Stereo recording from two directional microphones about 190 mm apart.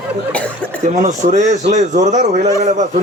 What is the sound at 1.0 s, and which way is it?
Speech, 40° right (ahead or behind).